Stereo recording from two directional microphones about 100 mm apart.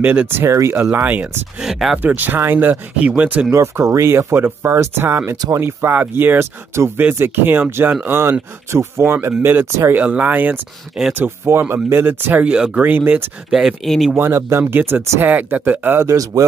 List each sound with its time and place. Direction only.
0.0 s speech: 15° right (ahead or behind)
0.9 s speech: 20° right (ahead or behind)
1.6 s speech: 5° right (ahead or behind)
2.0 s speech: 20° right (ahead or behind)
3.5 s speech: 25° right (ahead or behind)
13.5 s speech: 5° right (ahead or behind)
14.1 s speech: 25° right (ahead or behind)
16.1 s speech: 35° right (ahead or behind)